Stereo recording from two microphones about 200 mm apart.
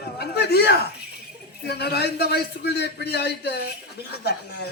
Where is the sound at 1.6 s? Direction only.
55° left (ahead or behind).